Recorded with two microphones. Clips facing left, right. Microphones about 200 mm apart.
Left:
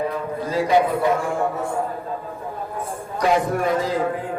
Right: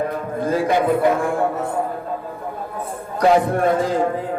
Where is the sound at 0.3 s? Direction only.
50° right (ahead or behind).